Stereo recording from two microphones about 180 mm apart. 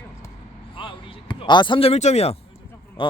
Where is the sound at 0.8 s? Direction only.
30° left (ahead or behind).